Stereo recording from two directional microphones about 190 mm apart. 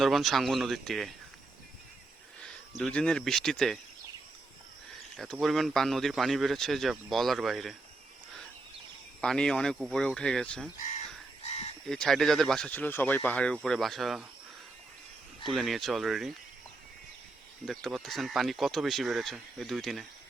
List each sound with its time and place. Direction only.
0.0 s speech: centre (ahead or behind)
2.4 s speech: 5° left (ahead or behind)
5.1 s speech: centre (ahead or behind)
9.2 s speech: 5° left (ahead or behind)
11.4 s crow: 35° left (ahead or behind)
11.9 s speech: centre (ahead or behind)
15.5 s speech: centre (ahead or behind)
17.7 s speech: centre (ahead or behind)